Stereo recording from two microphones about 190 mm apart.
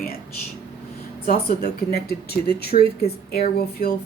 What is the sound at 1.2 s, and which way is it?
Speech, 50° left (ahead or behind).